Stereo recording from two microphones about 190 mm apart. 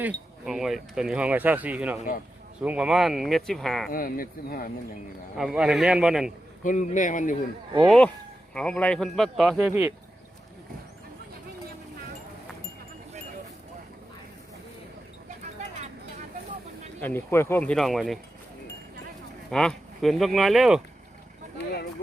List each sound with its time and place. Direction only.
0.4 s speech: centre (ahead or behind)
2.0 s speech: 45° left (ahead or behind)
2.6 s a man's voice: 5° right (ahead or behind)
3.8 s speech: 50° left (ahead or behind)
5.4 s a man's voice: 5° right (ahead or behind)
6.6 s speech: 40° left (ahead or behind)
7.9 s a man's voice: 5° left (ahead or behind)
17.0 s speech: 10° left (ahead or behind)
19.5 s a man's voice: centre (ahead or behind)